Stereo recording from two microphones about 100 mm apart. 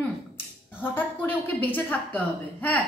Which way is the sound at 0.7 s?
20° left (ahead or behind).